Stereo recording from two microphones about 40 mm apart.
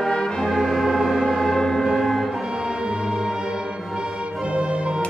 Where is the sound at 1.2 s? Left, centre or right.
Centre.